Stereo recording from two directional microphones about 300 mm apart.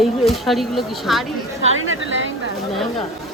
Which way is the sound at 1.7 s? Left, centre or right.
Right.